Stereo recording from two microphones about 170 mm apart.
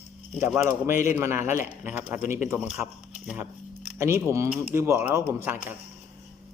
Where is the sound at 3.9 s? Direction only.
15° right (ahead or behind).